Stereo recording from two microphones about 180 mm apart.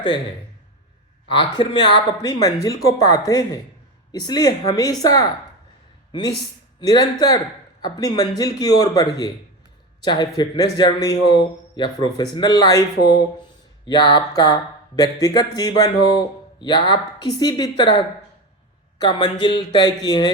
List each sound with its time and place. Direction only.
1.3 s speech: 25° left (ahead or behind)
13.8 s speech: 25° left (ahead or behind)
18.9 s speech: 25° left (ahead or behind)